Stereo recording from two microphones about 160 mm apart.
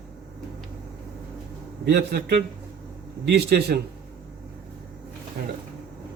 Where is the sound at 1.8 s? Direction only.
90° right.